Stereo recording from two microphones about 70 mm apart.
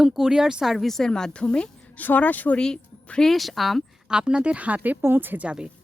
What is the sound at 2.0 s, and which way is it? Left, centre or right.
Speech, left.